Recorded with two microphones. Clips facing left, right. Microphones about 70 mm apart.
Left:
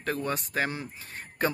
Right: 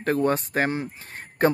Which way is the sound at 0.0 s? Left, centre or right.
Right.